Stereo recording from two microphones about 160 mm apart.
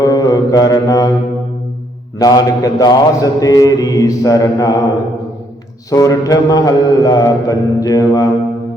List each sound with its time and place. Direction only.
0.0 s mantra: 20° left (ahead or behind)
2.1 s mantra: 25° left (ahead or behind)
5.9 s mantra: 20° left (ahead or behind)